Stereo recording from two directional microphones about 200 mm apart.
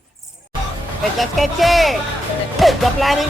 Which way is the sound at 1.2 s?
Centre (ahead or behind).